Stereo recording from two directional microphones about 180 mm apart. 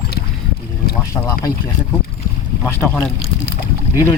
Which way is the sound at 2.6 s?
10° left (ahead or behind).